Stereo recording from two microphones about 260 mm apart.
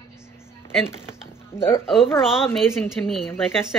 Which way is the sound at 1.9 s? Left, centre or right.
Centre.